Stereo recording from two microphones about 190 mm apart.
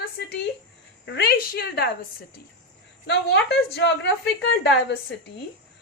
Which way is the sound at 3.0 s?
65° left (ahead or behind).